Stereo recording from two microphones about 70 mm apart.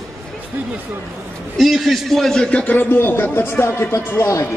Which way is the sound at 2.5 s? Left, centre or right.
Left.